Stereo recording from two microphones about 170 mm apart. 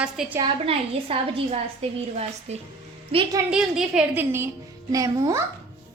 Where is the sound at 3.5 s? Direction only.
5° right (ahead or behind).